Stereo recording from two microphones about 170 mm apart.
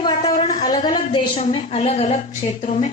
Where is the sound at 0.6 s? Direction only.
25° left (ahead or behind).